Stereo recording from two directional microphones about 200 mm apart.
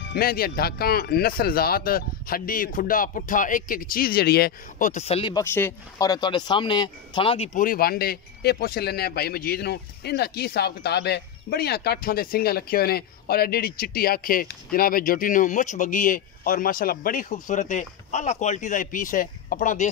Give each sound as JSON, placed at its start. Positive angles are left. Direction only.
{"t": 0.0, "sound": "speech", "side_deg": 50}
{"t": 5.3, "sound": "speech", "side_deg": 10}